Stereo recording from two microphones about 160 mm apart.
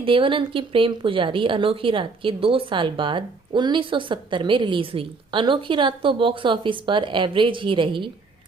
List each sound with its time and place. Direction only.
0.0 s a woman's voice: 35° right (ahead or behind)